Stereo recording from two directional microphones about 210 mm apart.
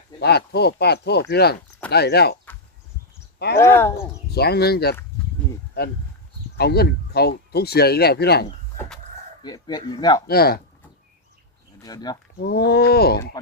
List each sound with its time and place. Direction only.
0.2 s speech: 50° left (ahead or behind)
3.3 s speech: 50° left (ahead or behind)
3.6 s speech: 10° left (ahead or behind)
4.3 s speech: 50° left (ahead or behind)
6.6 s speech: 50° left (ahead or behind)
9.4 s speech: 20° left (ahead or behind)
10.2 s speech: 45° left (ahead or behind)
11.8 s speech: 20° left (ahead or behind)
12.5 s speech: 50° left (ahead or behind)